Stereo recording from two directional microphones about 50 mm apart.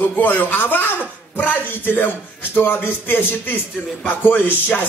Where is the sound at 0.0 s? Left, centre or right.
Left.